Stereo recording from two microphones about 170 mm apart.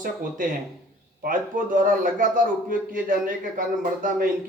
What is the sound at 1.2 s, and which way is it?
A man's voice, 55° right (ahead or behind).